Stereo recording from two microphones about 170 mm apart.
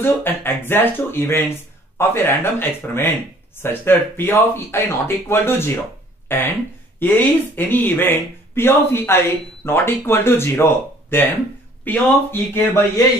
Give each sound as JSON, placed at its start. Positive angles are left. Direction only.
{"t": 0.0, "sound": "speech", "side_deg": 10}